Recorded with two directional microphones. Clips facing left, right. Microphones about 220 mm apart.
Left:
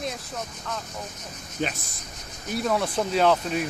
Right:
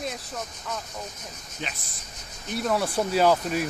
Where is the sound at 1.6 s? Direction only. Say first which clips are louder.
Left 8 dB; 45° left (ahead or behind).